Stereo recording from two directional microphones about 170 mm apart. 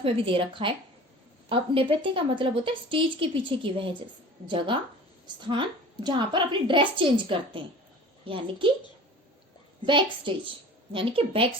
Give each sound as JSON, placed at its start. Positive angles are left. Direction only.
{"t": 0.0, "sound": "a woman's voice", "side_deg": -30}
{"t": 9.8, "sound": "a woman's voice", "side_deg": -30}